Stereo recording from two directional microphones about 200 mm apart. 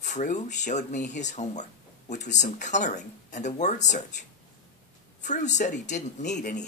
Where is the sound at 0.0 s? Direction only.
35° left (ahead or behind).